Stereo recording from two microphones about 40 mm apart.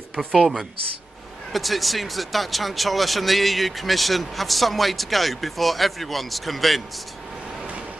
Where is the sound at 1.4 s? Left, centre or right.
Centre.